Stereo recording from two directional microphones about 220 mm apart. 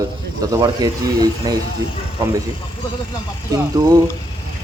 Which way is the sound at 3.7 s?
15° right (ahead or behind).